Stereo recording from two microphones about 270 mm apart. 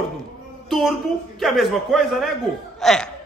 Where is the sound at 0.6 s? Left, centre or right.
Centre.